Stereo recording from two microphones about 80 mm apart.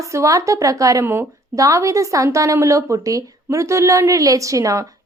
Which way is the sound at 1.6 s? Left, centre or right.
Right.